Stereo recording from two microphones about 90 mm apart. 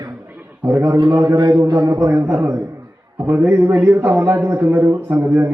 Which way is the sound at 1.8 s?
35° right (ahead or behind).